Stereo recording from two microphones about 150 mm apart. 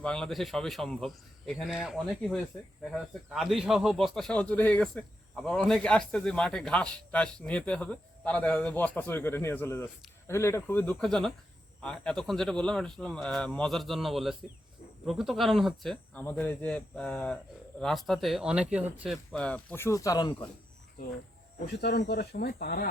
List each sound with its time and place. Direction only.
0.0 s speech: 5° left (ahead or behind)
11.0 s speech: 5° left (ahead or behind); by 20.5 s 25° left (ahead or behind)
21.8 s speech: 90° left